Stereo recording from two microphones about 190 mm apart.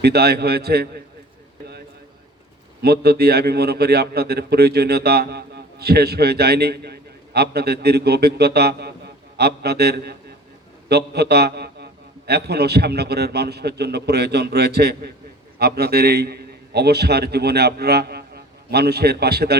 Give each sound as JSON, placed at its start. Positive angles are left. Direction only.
{"t": 0.0, "sound": "a man's voice", "side_deg": -55}
{"t": 2.8, "sound": "a man's voice", "side_deg": -55}